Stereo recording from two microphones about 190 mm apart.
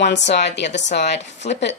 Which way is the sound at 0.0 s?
65° left (ahead or behind).